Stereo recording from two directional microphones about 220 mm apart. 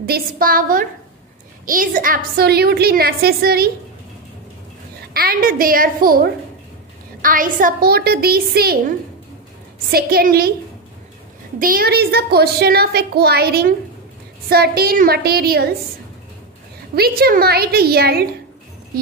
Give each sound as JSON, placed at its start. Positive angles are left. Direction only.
{"t": 0.0, "sound": "a woman's voice", "side_deg": -45}
{"t": 5.1, "sound": "a woman's voice", "side_deg": -40}
{"t": 11.6, "sound": "a woman's voice", "side_deg": -40}
{"t": 16.9, "sound": "a woman's voice", "side_deg": -45}